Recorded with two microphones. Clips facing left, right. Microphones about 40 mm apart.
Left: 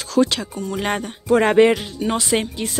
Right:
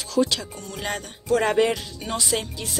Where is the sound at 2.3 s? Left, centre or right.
Left.